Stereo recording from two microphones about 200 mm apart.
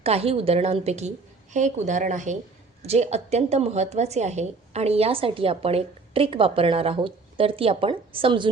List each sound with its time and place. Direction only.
0.0 s a woman's voice: 30° right (ahead or behind)